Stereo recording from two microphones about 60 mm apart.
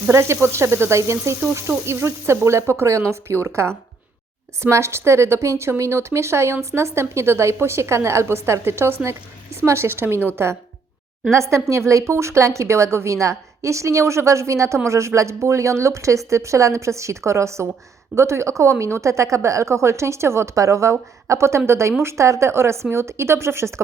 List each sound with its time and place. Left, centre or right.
0.1 s speech: right
11.3 s speech: right